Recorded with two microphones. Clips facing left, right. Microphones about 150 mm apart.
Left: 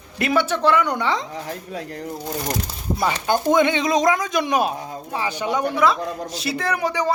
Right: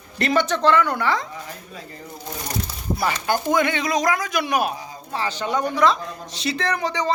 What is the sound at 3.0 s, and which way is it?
A man's voice, 20° left (ahead or behind).